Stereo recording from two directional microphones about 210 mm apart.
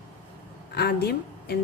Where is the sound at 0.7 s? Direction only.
50° left (ahead or behind).